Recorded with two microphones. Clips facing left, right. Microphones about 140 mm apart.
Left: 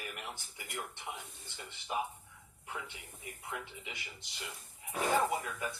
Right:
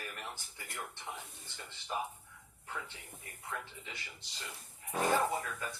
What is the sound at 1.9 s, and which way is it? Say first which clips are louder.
Speech: left 2 dB; 15° left (ahead or behind).